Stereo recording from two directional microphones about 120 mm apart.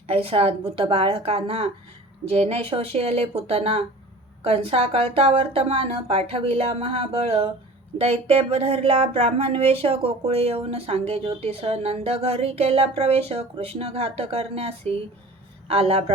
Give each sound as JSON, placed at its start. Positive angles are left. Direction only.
{"t": 0.1, "sound": "a woman's voice", "side_deg": -55}